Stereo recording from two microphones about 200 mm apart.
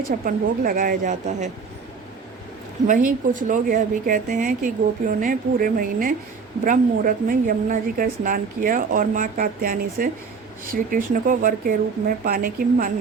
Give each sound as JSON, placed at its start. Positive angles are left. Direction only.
{"t": 0.3, "sound": "a woman's voice", "side_deg": -45}
{"t": 2.8, "sound": "a woman's voice", "side_deg": -40}